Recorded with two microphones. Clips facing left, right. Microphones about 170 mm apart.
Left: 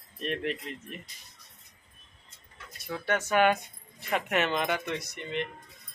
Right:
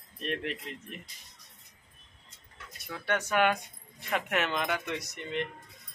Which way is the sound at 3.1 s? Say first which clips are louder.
Left 2 dB; 5° left (ahead or behind).